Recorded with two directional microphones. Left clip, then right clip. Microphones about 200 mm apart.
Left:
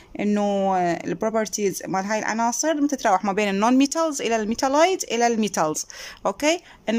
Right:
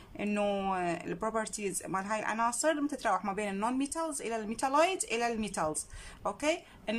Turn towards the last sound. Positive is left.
turn(degrees=35)  # may be behind; listen again after turning